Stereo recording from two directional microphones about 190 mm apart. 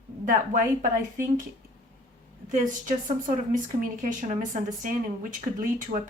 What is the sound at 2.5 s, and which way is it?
Speech, 40° right (ahead or behind).